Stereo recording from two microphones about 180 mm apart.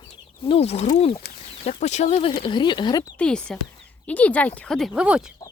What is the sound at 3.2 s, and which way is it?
Speech, 5° left (ahead or behind).